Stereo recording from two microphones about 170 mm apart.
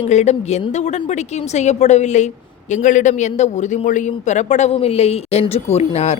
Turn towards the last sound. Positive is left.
turn(degrees=40)  # may be behind; listen again after turning